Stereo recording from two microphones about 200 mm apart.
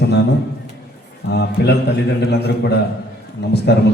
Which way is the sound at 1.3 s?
55° left (ahead or behind).